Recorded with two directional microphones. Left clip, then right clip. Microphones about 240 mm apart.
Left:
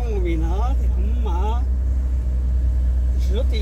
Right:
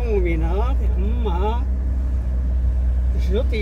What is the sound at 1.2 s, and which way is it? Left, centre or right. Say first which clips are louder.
Speech: right 4 dB; right.